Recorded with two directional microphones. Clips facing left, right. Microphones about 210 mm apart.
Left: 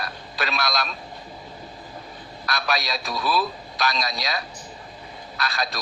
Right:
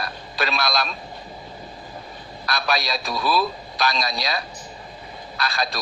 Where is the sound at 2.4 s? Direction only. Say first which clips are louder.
Right 2 dB; 35° right (ahead or behind).